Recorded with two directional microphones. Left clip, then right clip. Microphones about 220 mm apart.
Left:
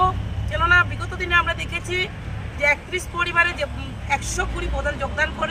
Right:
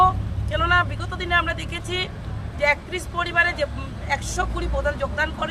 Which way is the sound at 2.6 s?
20° right (ahead or behind).